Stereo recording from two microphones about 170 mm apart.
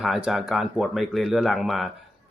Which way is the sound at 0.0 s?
Centre (ahead or behind).